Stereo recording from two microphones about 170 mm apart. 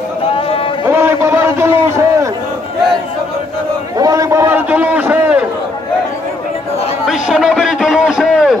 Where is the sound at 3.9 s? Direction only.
20° right (ahead or behind).